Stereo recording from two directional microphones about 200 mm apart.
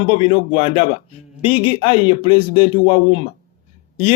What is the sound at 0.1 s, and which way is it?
Speech, 30° left (ahead or behind).